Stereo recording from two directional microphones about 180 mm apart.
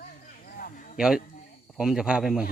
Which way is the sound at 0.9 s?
5° right (ahead or behind).